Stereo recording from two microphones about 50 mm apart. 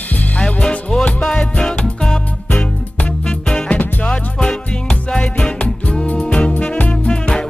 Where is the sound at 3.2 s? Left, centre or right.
Centre.